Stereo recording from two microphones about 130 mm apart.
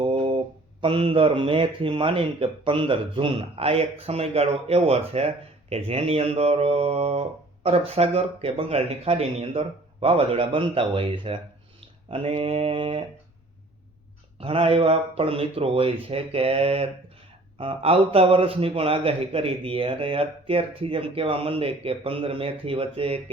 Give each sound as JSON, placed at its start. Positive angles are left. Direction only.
{"t": 0.0, "sound": "mantra", "side_deg": -40}
{"t": 0.8, "sound": "speech", "side_deg": -45}
{"t": 14.3, "sound": "speech", "side_deg": -45}